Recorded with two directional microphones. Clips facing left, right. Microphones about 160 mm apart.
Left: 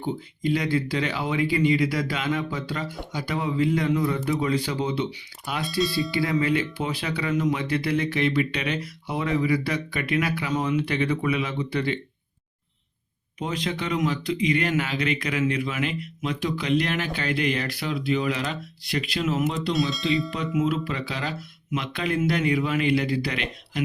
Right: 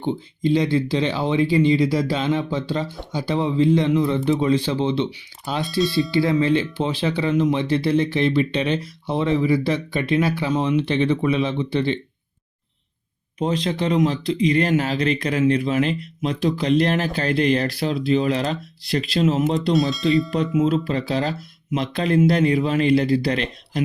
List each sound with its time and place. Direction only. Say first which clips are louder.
0.0 s speech: right 5 dB; 25° right (ahead or behind)
5.6 s speech: right 4 dB; centre (ahead or behind)
6.1 s speech: right 5 dB; 25° right (ahead or behind)
13.4 s speech: right 7 dB; 35° right (ahead or behind)
19.7 s speech: right 7 dB; centre (ahead or behind)
20.3 s speech: right 5 dB; 30° right (ahead or behind)